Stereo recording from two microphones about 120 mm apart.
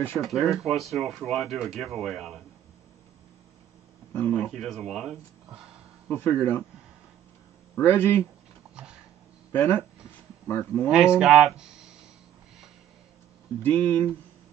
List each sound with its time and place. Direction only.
0.2 s speech: centre (ahead or behind)
4.1 s speech: 15° left (ahead or behind)
4.5 s speech: centre (ahead or behind)
6.0 s speech: 20° left (ahead or behind)
7.8 s speech: 20° left (ahead or behind)
8.7 s dog: 5° right (ahead or behind)
9.5 s speech: 15° left (ahead or behind)
10.9 s speech: 5° right (ahead or behind)
13.6 s speech: 15° left (ahead or behind)